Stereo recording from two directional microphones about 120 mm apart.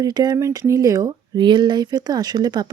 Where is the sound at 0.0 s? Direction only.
35° right (ahead or behind).